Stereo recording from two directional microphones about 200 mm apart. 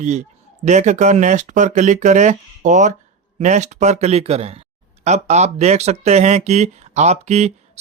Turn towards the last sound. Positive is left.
turn(degrees=-35)  # may be behind; listen again after turning